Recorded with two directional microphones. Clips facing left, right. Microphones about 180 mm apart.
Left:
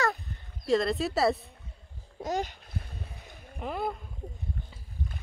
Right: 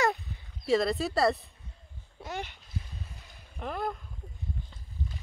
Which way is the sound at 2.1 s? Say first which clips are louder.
Left 7 dB; 40° left (ahead or behind).